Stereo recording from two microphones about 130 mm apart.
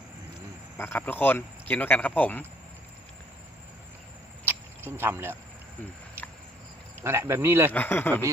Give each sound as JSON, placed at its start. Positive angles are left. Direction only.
{"t": 0.8, "sound": "speech", "side_deg": 15}
{"t": 4.4, "sound": "cricket", "side_deg": -15}
{"t": 7.0, "sound": "speech", "side_deg": -20}
{"t": 7.7, "sound": "speech", "side_deg": 15}